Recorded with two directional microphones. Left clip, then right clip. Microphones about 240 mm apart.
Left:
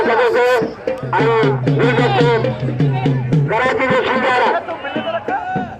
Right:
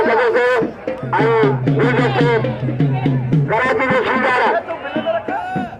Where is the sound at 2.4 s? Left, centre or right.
Left.